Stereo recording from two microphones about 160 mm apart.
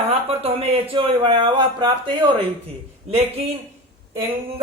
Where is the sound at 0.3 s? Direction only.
40° right (ahead or behind).